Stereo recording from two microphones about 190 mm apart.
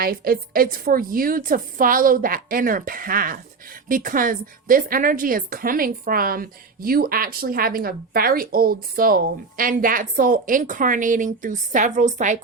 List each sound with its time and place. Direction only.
0.0 s a woman's voice: 50° right (ahead or behind)